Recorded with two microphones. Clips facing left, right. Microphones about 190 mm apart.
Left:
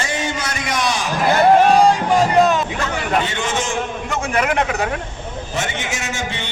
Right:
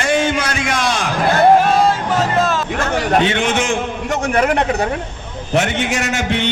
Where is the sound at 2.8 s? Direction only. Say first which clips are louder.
Right 4 dB; 40° right (ahead or behind).